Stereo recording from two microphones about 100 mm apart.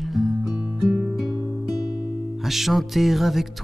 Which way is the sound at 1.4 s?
40° left (ahead or behind).